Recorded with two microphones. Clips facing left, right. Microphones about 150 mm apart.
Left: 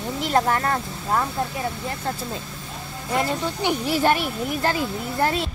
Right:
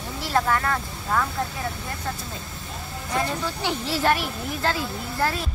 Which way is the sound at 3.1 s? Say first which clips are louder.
Left 3 dB; 20° left (ahead or behind).